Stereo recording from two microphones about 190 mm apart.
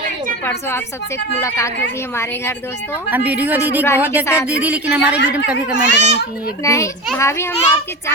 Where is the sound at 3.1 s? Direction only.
10° right (ahead or behind).